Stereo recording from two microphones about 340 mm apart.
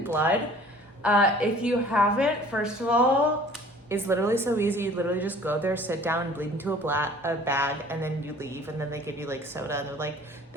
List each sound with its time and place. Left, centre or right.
0.1 s a woman's voice: centre